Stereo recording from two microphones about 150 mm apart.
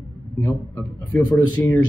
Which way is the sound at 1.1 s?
15° left (ahead or behind).